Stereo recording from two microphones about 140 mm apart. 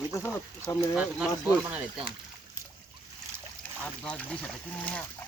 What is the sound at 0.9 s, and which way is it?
Speech, 5° right (ahead or behind).